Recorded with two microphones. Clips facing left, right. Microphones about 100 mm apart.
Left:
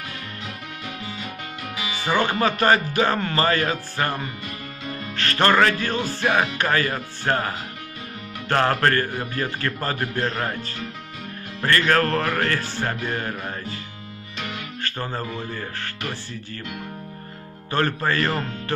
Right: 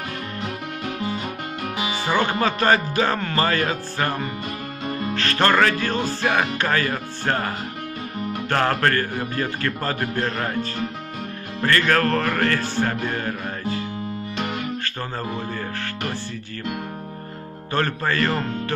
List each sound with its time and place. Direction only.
1.8 s music: 25° right (ahead or behind)
2.0 s speech: 5° left (ahead or behind)
11.6 s speech: 5° left (ahead or behind)
14.9 s speech: 10° left (ahead or behind)
17.7 s speech: 10° left (ahead or behind)